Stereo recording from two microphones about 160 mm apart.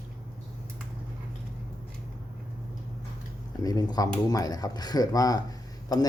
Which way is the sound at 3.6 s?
25° left (ahead or behind).